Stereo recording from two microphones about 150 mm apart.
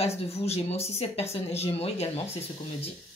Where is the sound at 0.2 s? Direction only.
45° left (ahead or behind).